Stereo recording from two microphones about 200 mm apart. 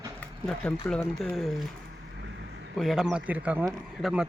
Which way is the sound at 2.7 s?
Centre (ahead or behind).